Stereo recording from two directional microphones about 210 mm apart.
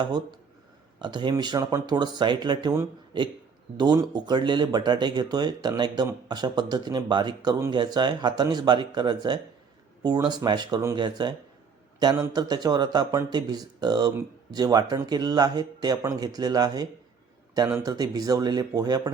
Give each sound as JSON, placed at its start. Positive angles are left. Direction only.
{"t": 0.0, "sound": "speech", "side_deg": -20}